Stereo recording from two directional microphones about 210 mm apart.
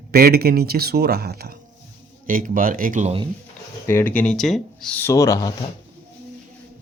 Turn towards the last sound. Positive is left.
turn(degrees=15)  # may be behind; listen again after turning